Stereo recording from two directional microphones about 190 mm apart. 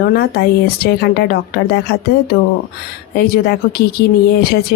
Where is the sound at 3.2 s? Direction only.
55° left (ahead or behind).